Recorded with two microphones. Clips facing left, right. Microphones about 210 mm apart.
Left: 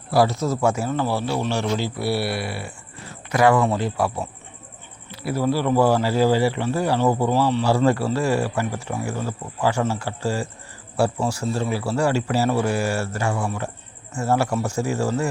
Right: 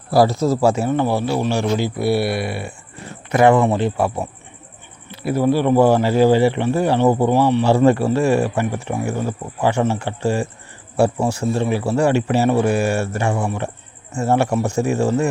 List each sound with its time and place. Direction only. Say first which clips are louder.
0.1 s speech: right 4 dB; 35° right (ahead or behind)